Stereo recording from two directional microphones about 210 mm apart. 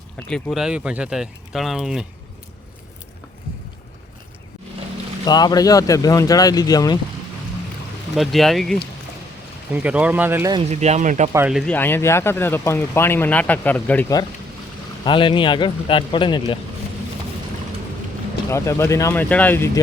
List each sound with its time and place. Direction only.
0.2 s speech: 5° left (ahead or behind)
5.2 s speech: 20° left (ahead or behind)
8.1 s speech: centre (ahead or behind)
10.7 s speech: 30° right (ahead or behind)
11.3 s speech: 10° right (ahead or behind); by 14.2 s 10° left (ahead or behind)
15.0 s speech: 25° left (ahead or behind)
18.5 s speech: 15° left (ahead or behind)